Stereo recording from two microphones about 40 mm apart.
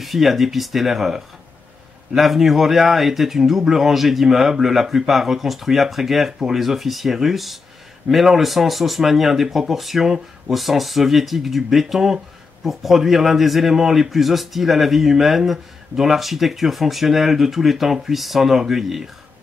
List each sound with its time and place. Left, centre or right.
0.0 s speech: centre